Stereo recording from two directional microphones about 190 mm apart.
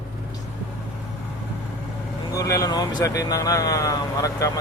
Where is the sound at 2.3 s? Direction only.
20° left (ahead or behind).